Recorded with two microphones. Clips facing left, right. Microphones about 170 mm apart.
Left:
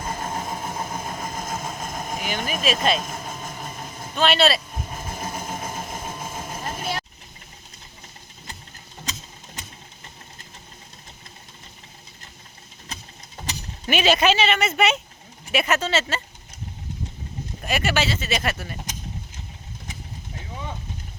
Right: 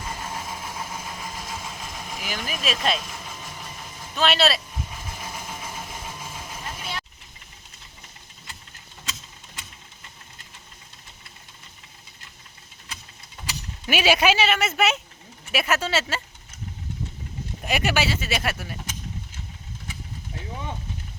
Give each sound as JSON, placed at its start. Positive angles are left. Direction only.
{"t": 0.0, "sound": "vehicle", "side_deg": 45}
{"t": 2.4, "sound": "speech", "side_deg": 50}
{"t": 3.0, "sound": "vehicle", "side_deg": 45}
{"t": 4.1, "sound": "speech", "side_deg": 0}
{"t": 4.9, "sound": "a sound", "side_deg": 45}
{"t": 12.9, "sound": "a sound", "side_deg": 40}
{"t": 13.8, "sound": "speech", "side_deg": -10}
{"t": 17.6, "sound": "speech", "side_deg": -15}